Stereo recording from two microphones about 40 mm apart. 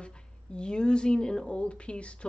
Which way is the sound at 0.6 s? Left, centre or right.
Left.